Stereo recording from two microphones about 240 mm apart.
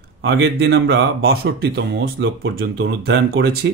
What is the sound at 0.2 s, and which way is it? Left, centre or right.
Speech, right.